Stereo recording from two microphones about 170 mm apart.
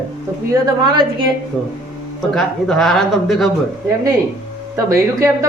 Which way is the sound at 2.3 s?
Centre (ahead or behind).